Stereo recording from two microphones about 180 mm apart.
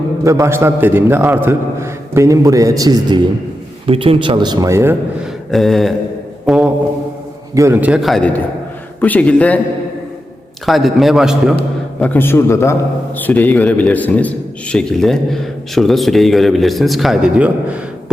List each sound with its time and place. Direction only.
0.3 s a man's voice: 15° right (ahead or behind)
5.2 s mantra: centre (ahead or behind)
6.4 s a sound: centre (ahead or behind)
7.5 s a man's voice: 15° right (ahead or behind); by 9.6 s 10° left (ahead or behind)
10.7 s a man's voice: centre (ahead or behind)
11.9 s a man's voice: 10° left (ahead or behind)